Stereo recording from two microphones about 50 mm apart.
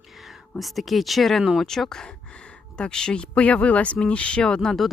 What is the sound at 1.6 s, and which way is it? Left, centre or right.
Speech, centre.